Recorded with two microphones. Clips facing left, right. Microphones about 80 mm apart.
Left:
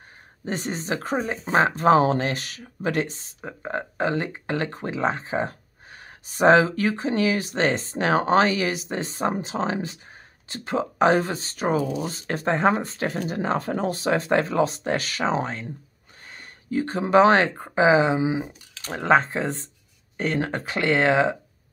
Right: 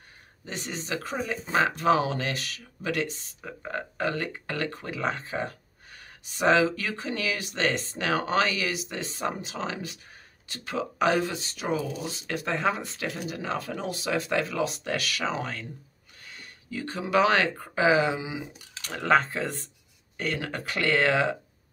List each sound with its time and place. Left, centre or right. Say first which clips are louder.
0.5 s speech: left 6 dB; left